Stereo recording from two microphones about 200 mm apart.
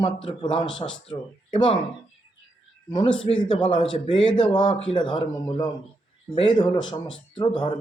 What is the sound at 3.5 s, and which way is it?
A man's voice, 25° left (ahead or behind).